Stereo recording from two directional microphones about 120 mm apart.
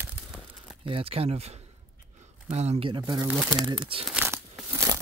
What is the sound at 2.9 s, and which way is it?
Speech, 35° right (ahead or behind).